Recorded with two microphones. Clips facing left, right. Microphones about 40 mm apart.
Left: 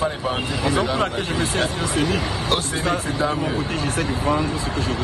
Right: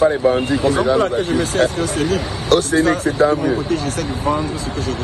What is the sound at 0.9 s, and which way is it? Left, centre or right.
Speech, left.